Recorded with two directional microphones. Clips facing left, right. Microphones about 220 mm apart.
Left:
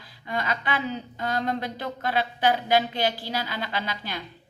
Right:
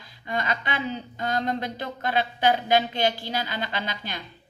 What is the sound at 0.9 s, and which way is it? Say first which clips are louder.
Speech: even; 30° right (ahead or behind).